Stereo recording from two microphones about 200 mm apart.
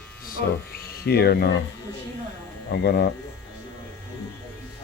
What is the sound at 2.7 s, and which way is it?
Speech, 55° left (ahead or behind).